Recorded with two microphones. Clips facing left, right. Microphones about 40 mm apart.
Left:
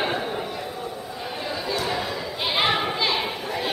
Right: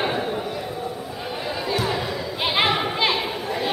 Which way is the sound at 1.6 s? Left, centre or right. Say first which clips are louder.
Right 2 dB; centre.